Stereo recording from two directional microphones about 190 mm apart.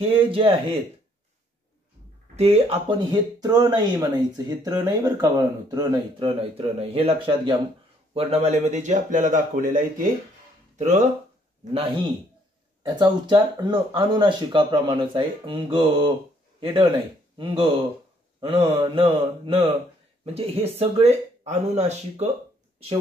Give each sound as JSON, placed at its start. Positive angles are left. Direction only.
{"t": 0.0, "sound": "speech", "side_deg": -30}
{"t": 2.3, "sound": "speech", "side_deg": -30}
{"t": 3.3, "sound": "speech", "side_deg": -20}
{"t": 12.8, "sound": "speech", "side_deg": -25}
{"t": 16.5, "sound": "a sound", "side_deg": -25}
{"t": 17.4, "sound": "speech", "side_deg": -25}